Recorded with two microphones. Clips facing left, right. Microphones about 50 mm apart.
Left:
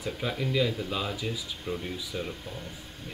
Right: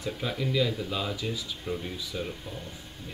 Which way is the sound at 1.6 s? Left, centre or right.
Left.